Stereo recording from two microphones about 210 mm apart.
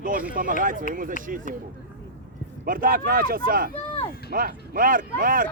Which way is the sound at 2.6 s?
40° right (ahead or behind).